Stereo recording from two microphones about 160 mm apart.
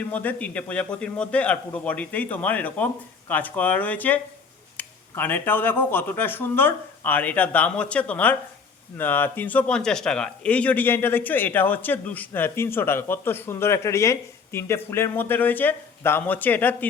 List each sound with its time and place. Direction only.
0.0 s speech: 10° left (ahead or behind)